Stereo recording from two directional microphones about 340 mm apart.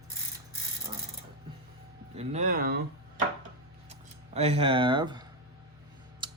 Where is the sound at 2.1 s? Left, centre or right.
Right.